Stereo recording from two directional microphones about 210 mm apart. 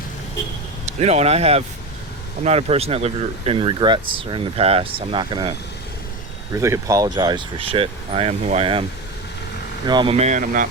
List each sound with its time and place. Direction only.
0.9 s speech: 30° right (ahead or behind)
6.6 s speech: 15° right (ahead or behind)
9.8 s speech: 20° right (ahead or behind); by 10.7 s 40° right (ahead or behind)